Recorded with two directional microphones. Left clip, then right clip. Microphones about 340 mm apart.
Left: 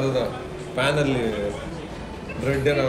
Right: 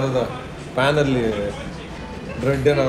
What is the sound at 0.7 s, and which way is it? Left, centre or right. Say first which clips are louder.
Speech: right 4 dB; centre.